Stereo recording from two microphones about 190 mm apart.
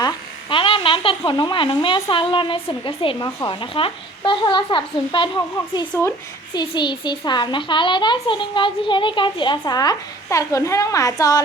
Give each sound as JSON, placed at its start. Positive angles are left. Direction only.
{"t": 0.5, "sound": "a woman's voice", "side_deg": 25}